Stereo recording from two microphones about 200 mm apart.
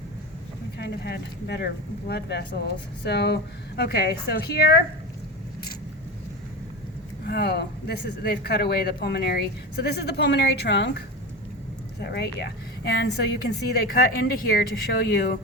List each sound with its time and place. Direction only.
0.8 s a woman's voice: 55° left (ahead or behind)
7.3 s speech: 55° left (ahead or behind)